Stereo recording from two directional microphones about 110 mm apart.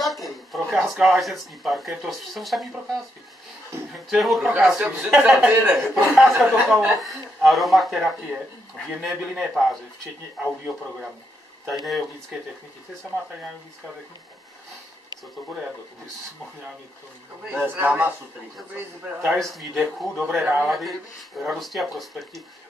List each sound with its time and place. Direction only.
0.0 s speech: centre (ahead or behind)
4.1 s speech: centre (ahead or behind)
5.9 s speech: 5° right (ahead or behind)
10.7 s speech: centre (ahead or behind)
17.5 s speech: 15° right (ahead or behind)
19.3 s speech: centre (ahead or behind)
20.6 s speech: centre (ahead or behind)